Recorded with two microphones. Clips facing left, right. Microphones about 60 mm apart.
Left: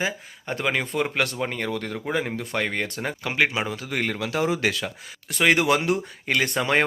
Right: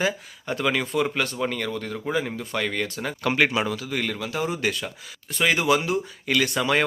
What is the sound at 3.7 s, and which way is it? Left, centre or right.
Speech, left.